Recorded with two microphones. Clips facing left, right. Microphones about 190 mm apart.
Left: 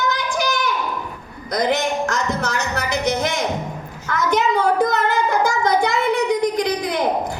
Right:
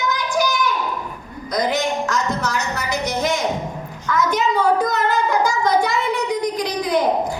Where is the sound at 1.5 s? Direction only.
55° left (ahead or behind).